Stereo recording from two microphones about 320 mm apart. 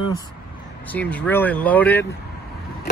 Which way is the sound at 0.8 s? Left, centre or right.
Centre.